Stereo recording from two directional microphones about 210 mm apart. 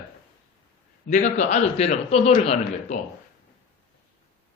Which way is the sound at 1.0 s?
35° left (ahead or behind).